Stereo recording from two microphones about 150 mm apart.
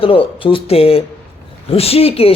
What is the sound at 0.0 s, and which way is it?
Speech, 35° left (ahead or behind).